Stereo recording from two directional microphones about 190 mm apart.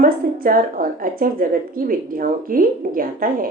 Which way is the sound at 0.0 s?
50° right (ahead or behind).